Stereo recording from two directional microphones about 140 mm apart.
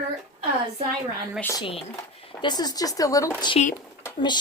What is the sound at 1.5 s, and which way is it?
Speech, 40° left (ahead or behind).